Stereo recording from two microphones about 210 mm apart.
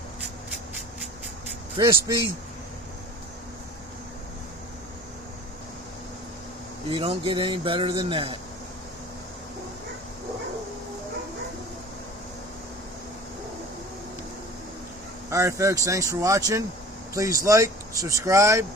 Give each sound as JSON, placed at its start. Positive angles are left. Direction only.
{"t": 1.7, "sound": "speech", "side_deg": -25}
{"t": 6.9, "sound": "speech", "side_deg": -25}
{"t": 15.3, "sound": "speech", "side_deg": -15}